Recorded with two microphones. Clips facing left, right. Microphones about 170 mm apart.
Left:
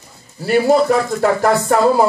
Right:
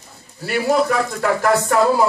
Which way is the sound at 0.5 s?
35° left (ahead or behind).